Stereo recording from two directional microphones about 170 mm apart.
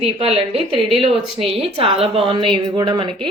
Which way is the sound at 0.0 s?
35° right (ahead or behind).